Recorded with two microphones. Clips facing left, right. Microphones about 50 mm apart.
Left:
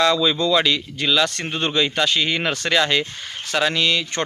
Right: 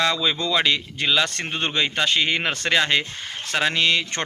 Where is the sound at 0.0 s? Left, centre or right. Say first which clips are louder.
Left 4 dB; right.